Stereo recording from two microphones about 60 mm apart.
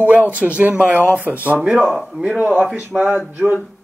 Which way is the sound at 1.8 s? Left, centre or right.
Centre.